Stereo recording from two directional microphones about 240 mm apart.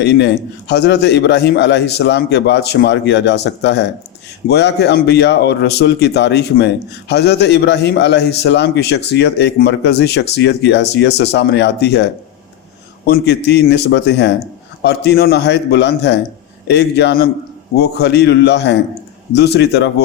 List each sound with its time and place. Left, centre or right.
0.0 s a man's voice: left